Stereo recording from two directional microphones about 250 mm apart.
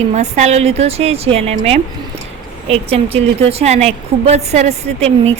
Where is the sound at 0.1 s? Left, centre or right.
Right.